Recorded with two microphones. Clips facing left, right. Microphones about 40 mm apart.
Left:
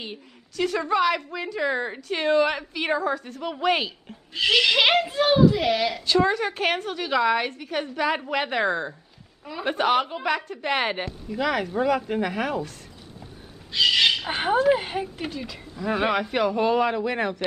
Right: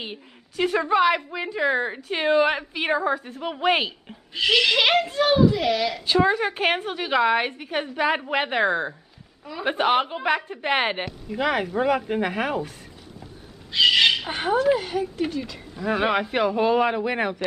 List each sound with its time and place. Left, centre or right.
0.0 s a woman's voice: centre
4.4 s speech: centre
6.0 s a woman's voice: centre
13.7 s bird: centre
14.8 s a woman's voice: left
15.1 s a woman's voice: centre